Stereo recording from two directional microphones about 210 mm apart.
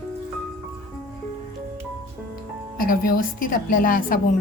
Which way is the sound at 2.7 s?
40° left (ahead or behind).